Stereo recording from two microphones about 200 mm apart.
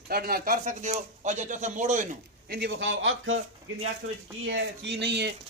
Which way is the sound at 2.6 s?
60° right (ahead or behind).